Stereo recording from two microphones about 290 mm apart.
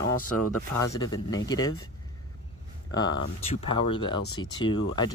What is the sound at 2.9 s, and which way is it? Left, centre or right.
Speech, centre.